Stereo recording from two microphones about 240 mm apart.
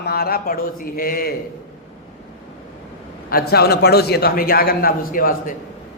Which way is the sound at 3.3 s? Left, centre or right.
Left.